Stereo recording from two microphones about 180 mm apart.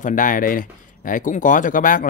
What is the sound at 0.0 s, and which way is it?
Speech, 45° left (ahead or behind).